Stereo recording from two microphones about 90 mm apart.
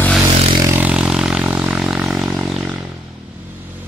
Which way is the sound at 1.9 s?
Centre (ahead or behind).